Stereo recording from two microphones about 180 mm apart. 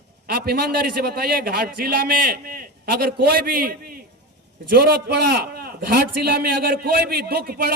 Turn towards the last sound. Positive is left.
turn(degrees=-60)  # may be behind; listen again after turning